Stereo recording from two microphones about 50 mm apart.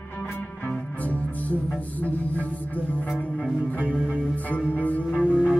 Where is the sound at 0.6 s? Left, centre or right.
Left.